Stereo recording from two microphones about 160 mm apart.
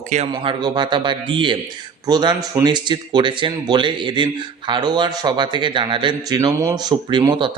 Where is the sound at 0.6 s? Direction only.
30° right (ahead or behind).